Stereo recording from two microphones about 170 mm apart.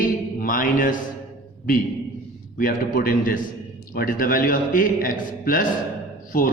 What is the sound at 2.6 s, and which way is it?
A man's voice, 55° left (ahead or behind).